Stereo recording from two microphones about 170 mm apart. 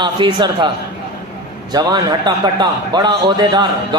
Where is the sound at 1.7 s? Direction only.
25° right (ahead or behind).